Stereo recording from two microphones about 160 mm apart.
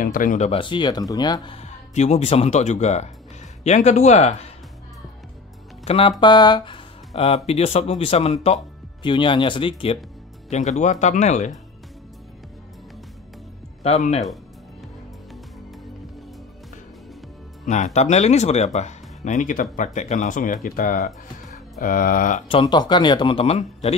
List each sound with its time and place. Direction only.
0.0 s speech: 55° left (ahead or behind)
0.5 s speech: 30° left (ahead or behind)
5.9 s speech: 35° left (ahead or behind)
10.5 s speech: 45° left (ahead or behind)
13.8 s speech: 45° left (ahead or behind)
17.6 s speech: 45° left (ahead or behind)
22.5 s speech: 30° left (ahead or behind)